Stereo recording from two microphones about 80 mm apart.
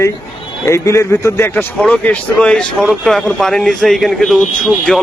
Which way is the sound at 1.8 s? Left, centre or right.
Centre.